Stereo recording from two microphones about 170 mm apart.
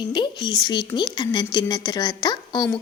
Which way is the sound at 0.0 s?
25° left (ahead or behind).